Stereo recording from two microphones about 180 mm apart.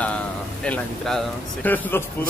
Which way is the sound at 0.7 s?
5° left (ahead or behind).